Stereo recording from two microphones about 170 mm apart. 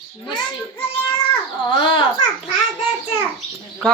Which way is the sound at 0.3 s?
25° left (ahead or behind).